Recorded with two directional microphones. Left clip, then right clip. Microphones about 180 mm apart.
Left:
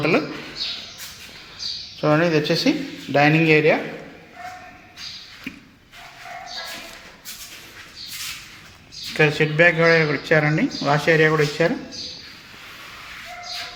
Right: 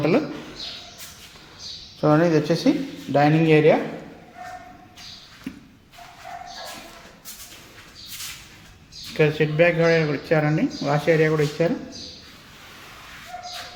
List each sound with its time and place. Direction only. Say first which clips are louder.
0.0 s speech: left 1 dB; 20° right (ahead or behind)
2.0 s a woman's voice: even; 10° right (ahead or behind)
9.1 s speech: left 2 dB; centre (ahead or behind)